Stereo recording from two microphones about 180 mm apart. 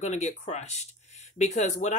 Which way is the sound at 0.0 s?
40° left (ahead or behind).